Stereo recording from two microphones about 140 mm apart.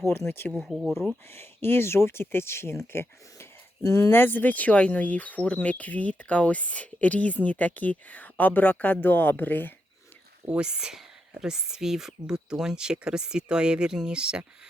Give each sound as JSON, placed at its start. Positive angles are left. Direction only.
{"t": 0.1, "sound": "speech", "side_deg": 15}
{"t": 0.5, "sound": "speech", "side_deg": -5}
{"t": 1.3, "sound": "speech", "side_deg": 15}
{"t": 10.4, "sound": "speech", "side_deg": -5}